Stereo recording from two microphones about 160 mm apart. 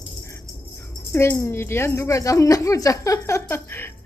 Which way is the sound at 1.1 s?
15° left (ahead or behind).